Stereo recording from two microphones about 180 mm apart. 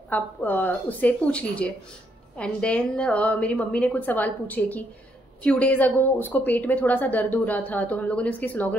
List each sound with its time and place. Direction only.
0.1 s a woman's voice: 10° left (ahead or behind)